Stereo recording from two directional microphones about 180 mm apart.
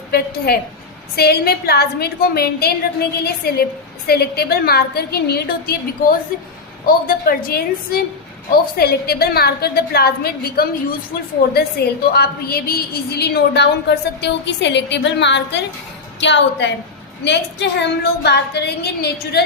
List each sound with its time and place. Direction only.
0.1 s a woman's voice: 60° left (ahead or behind)